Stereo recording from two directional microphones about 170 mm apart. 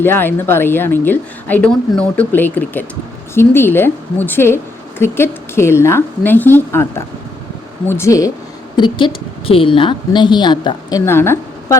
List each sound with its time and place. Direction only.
0.0 s a woman's voice: 10° left (ahead or behind)
8.7 s a woman's voice: 25° left (ahead or behind)